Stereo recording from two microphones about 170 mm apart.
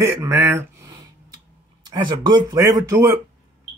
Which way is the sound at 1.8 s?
25° right (ahead or behind).